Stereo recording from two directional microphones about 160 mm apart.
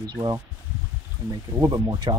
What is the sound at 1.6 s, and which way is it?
Speech, 25° right (ahead or behind).